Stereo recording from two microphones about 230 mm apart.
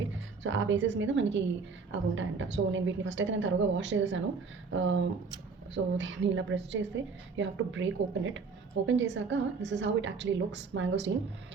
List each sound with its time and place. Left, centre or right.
0.4 s a woman's voice: right